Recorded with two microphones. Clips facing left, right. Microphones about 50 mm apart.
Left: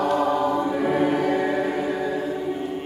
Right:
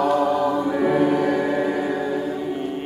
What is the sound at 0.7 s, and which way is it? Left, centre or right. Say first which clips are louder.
Choir: right 3 dB; centre.